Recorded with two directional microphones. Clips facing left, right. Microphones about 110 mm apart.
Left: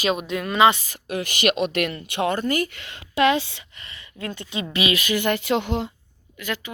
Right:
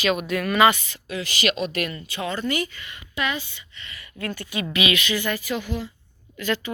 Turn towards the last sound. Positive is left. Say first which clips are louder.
# right 4 dB
turn(degrees=15)  # may be behind; listen again after turning